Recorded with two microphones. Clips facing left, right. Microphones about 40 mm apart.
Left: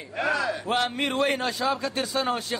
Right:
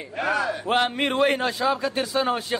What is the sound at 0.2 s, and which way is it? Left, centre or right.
Speech, right.